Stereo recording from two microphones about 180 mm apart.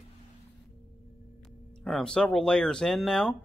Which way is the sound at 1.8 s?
5° left (ahead or behind).